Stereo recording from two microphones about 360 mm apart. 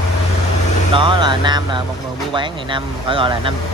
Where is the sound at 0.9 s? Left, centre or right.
Centre.